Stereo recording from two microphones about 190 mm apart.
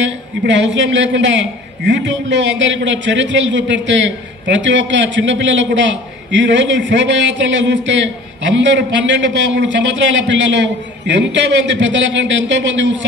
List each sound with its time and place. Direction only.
0.0 s a man's voice: 70° right (ahead or behind)